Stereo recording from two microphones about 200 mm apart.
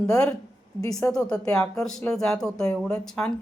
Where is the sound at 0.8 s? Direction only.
15° left (ahead or behind).